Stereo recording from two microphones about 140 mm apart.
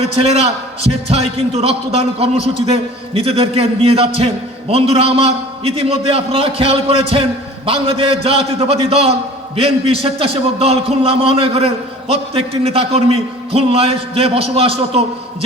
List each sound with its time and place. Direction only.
0.2 s a man's voice: 50° right (ahead or behind)